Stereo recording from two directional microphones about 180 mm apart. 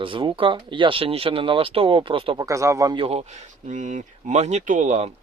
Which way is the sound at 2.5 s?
15° right (ahead or behind).